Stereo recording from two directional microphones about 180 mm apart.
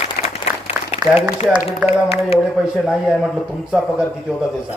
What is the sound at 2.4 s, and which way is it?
Speech, 5° right (ahead or behind).